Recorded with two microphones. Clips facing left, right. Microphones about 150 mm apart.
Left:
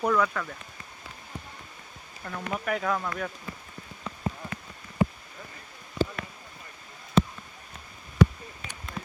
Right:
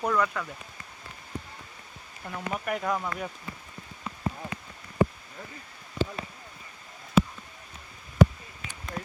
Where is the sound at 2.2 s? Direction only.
10° right (ahead or behind).